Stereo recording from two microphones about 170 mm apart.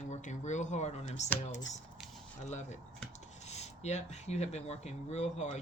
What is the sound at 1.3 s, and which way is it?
Speech, 20° left (ahead or behind).